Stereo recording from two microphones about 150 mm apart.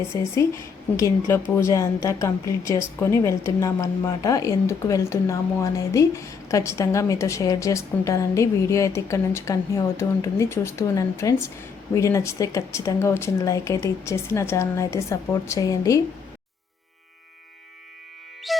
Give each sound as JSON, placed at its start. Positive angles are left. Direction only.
{"t": 0.1, "sound": "speech", "side_deg": 20}